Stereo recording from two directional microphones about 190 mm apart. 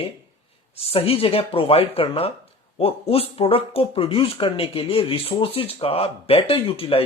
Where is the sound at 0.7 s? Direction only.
30° left (ahead or behind).